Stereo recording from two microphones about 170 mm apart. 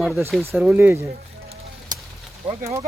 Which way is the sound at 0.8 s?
15° right (ahead or behind).